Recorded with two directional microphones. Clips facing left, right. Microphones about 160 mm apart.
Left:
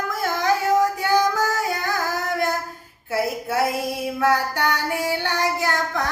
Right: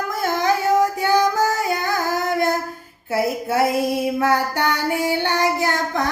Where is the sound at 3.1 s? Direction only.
25° right (ahead or behind).